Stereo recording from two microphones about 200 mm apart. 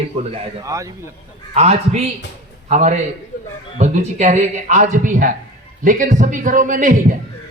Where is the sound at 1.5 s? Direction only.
30° right (ahead or behind).